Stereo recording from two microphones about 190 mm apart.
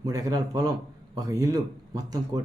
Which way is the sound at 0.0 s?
20° right (ahead or behind).